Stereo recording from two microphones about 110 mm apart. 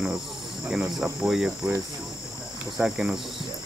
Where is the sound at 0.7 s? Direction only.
5° right (ahead or behind).